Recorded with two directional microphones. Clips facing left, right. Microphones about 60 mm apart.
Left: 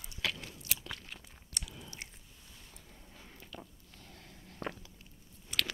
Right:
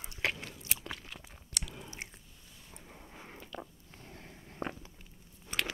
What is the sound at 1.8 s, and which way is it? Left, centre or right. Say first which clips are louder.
Chewing: right 3 dB; right.